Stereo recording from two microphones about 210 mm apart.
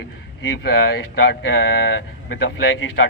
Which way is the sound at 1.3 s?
60° left (ahead or behind).